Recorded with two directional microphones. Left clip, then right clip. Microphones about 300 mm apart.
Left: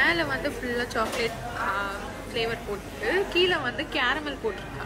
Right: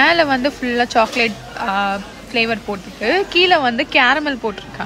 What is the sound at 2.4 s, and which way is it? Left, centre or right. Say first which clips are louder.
A woman's voice: right 11 dB; centre.